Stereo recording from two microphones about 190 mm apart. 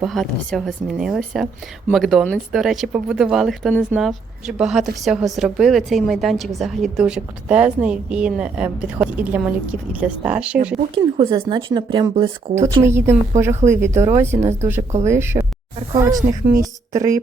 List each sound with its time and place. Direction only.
0.0 s speech: centre (ahead or behind)
10.9 s a woman's voice: 25° right (ahead or behind)
12.6 s a woman's voice: 15° right (ahead or behind)